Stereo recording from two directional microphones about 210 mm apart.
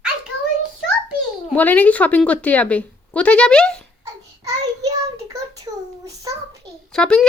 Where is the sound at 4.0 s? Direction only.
15° right (ahead or behind).